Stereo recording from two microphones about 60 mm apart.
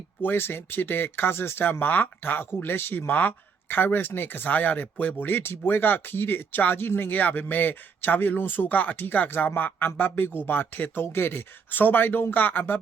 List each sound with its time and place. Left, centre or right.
0.2 s speech: left